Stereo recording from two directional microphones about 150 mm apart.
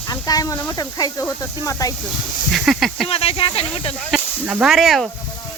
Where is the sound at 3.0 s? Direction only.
40° left (ahead or behind).